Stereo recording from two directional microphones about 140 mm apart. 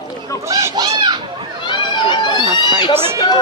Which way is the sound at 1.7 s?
35° left (ahead or behind).